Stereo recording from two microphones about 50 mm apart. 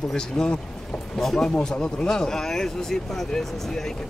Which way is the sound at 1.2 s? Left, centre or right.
Centre.